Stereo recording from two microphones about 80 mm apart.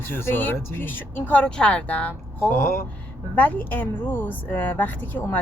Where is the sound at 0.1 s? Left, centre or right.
Left.